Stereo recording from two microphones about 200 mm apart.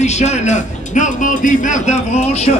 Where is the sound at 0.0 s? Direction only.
35° left (ahead or behind).